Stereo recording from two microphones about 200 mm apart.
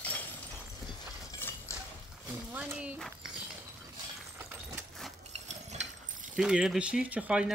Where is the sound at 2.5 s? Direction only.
5° right (ahead or behind).